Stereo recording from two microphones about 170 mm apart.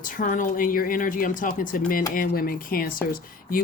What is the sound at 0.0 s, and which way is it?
Speech, 50° left (ahead or behind).